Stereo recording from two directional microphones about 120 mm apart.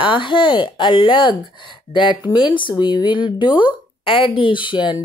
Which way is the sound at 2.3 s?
40° left (ahead or behind).